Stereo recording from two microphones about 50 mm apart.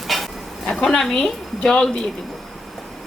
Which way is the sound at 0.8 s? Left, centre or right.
Centre.